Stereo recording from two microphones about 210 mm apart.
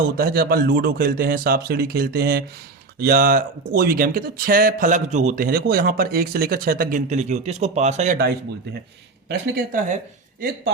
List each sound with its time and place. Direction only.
0.2 s speech: 45° right (ahead or behind)
9.3 s speech: 45° right (ahead or behind)